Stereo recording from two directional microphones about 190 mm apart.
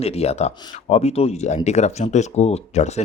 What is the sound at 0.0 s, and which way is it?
Speech, 35° left (ahead or behind).